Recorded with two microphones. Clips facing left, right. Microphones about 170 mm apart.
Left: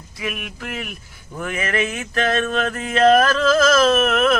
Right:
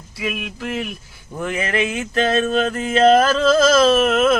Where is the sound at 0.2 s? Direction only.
25° right (ahead or behind).